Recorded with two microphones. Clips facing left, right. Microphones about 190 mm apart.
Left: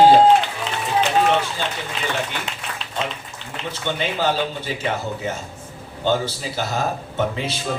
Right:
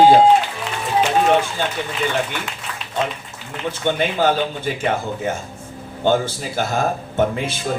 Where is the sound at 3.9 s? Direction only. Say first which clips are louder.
Right 4 dB; 50° right (ahead or behind).